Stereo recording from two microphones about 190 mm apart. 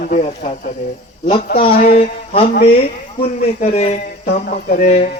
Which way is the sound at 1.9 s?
30° left (ahead or behind).